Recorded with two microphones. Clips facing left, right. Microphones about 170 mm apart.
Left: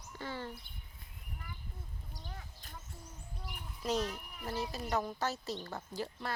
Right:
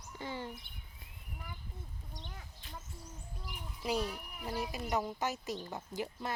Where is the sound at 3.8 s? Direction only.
10° right (ahead or behind).